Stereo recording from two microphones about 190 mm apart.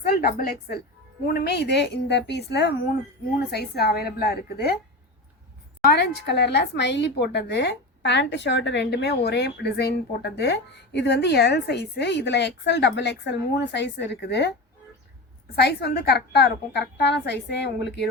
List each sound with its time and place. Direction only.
0.1 s a woman's voice: 50° left (ahead or behind)
5.8 s a woman's voice: 55° left (ahead or behind)
15.5 s a woman's voice: 60° left (ahead or behind)